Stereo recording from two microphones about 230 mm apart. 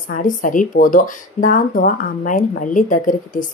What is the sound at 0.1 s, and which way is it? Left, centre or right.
Speech, left.